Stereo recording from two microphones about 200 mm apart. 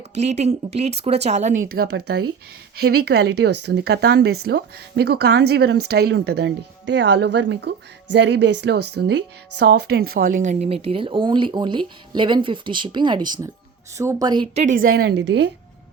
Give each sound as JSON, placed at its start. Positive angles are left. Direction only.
{"t": 0.1, "sound": "speech", "side_deg": -35}
{"t": 14.4, "sound": "speech", "side_deg": -35}
{"t": 14.9, "sound": "a woman's voice", "side_deg": -55}